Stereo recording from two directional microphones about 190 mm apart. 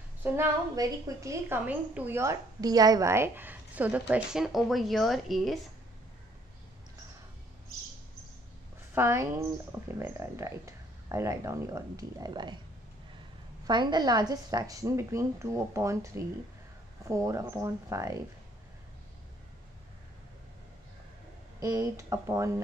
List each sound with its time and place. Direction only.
0.2 s a woman's voice: 15° right (ahead or behind)
8.9 s a woman's voice: 15° right (ahead or behind)
13.7 s a woman's voice: 25° right (ahead or behind)
21.5 s a woman's voice: 20° right (ahead or behind)